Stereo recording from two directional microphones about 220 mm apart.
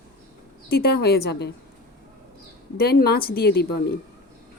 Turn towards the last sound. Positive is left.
turn(degrees=45)  # may be behind; listen again after turning